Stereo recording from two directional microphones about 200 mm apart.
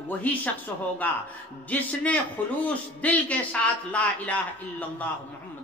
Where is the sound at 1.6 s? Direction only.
5° left (ahead or behind).